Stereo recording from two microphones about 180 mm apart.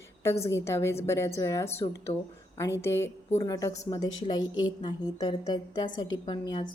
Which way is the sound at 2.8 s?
15° left (ahead or behind).